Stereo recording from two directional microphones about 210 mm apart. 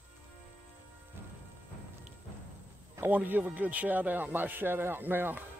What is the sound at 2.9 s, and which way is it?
Speech, 10° right (ahead or behind).